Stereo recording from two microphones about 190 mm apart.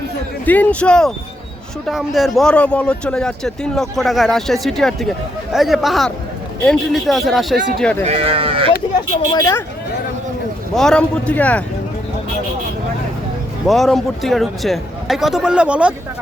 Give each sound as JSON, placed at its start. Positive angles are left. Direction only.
{"t": 0.4, "sound": "a man's voice", "side_deg": 10}
{"t": 8.0, "sound": "speech", "side_deg": -30}
{"t": 9.0, "sound": "speech", "side_deg": 20}
{"t": 10.8, "sound": "a man's voice", "side_deg": 5}
{"t": 13.7, "sound": "a man's voice", "side_deg": 0}